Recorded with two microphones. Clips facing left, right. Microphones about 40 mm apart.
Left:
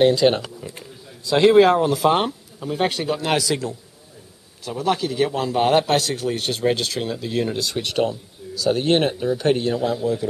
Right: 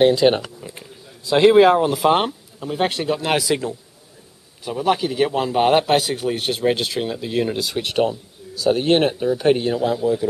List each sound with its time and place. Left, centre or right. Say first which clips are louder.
0.0 s a man's voice: right 1 dB; centre